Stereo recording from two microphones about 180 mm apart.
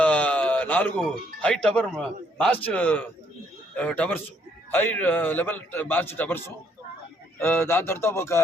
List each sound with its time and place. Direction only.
0.0 s a man's voice: 5° left (ahead or behind)